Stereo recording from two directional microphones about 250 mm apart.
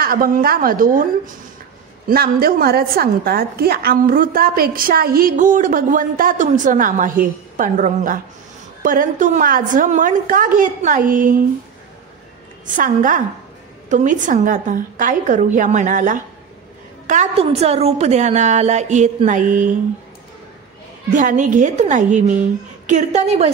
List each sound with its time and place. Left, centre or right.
0.0 s a woman's voice: right
12.6 s a woman's voice: right
21.1 s a woman's voice: right